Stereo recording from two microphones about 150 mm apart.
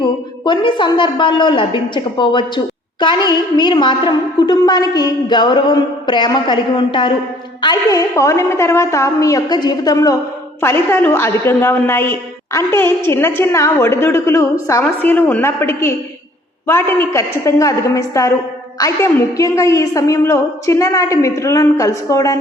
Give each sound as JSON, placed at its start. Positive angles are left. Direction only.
{"t": 0.0, "sound": "a woman's voice", "side_deg": 30}